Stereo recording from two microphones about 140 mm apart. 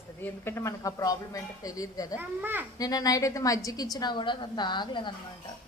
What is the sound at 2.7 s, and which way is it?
A woman's voice, 25° left (ahead or behind).